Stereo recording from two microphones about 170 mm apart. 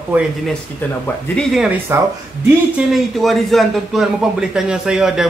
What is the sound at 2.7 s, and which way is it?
A man's voice, centre (ahead or behind).